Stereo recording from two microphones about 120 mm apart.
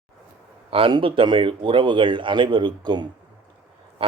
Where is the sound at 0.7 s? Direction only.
45° right (ahead or behind).